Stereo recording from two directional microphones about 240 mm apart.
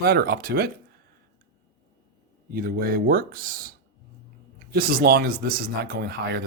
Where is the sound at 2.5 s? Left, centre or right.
Right.